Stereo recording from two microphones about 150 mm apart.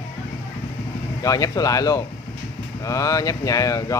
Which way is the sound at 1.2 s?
25° left (ahead or behind).